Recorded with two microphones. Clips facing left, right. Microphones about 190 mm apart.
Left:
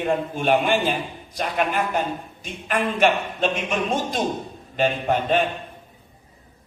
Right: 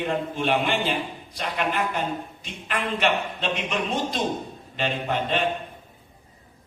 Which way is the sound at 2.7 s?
45° left (ahead or behind).